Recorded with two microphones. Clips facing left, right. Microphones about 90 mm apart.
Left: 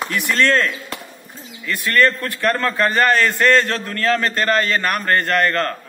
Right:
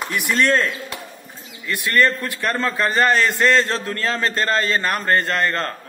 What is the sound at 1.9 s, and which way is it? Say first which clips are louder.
A man's voice: left 2 dB; 20° right (ahead or behind).